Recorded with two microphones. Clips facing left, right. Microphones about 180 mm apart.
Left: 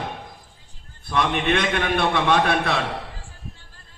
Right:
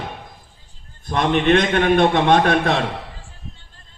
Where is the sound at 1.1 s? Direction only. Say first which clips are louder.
Right 5 dB; 40° right (ahead or behind).